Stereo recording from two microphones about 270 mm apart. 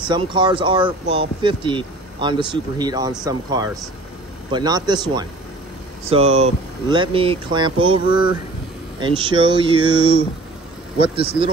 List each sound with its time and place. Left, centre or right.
0.1 s speech: centre